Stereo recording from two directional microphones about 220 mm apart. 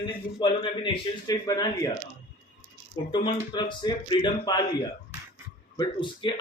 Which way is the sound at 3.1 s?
25° left (ahead or behind).